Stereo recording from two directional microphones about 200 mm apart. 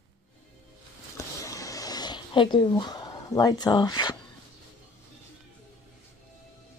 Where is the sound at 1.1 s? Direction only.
15° left (ahead or behind).